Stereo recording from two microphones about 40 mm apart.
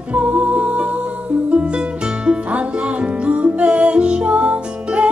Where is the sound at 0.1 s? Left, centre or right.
Right.